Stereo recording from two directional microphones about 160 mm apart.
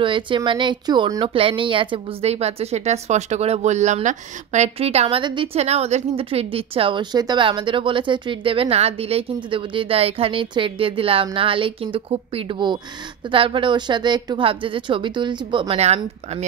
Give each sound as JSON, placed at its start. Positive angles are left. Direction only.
{"t": 0.0, "sound": "speech", "side_deg": -30}